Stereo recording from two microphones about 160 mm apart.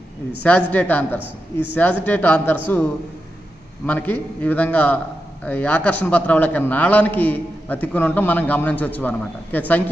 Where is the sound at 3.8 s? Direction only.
10° left (ahead or behind).